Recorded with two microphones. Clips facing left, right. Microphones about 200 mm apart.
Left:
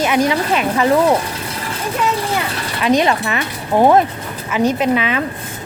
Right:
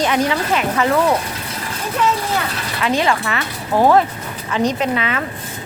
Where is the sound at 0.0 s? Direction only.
10° left (ahead or behind).